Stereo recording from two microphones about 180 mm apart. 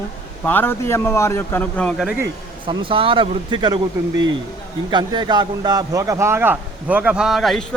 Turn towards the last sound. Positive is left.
turn(degrees=0)  # may be behind; listen again after turning